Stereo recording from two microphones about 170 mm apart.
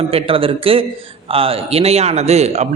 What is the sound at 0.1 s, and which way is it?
Speech, 35° right (ahead or behind).